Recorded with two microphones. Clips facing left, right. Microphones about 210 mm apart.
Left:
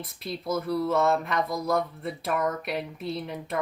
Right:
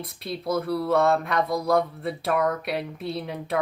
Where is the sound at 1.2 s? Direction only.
Centre (ahead or behind).